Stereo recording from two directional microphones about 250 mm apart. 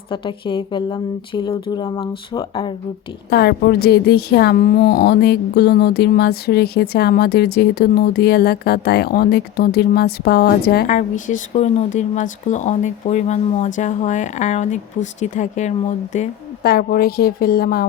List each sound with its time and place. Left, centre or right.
0.1 s a woman's voice: centre
3.2 s speech: left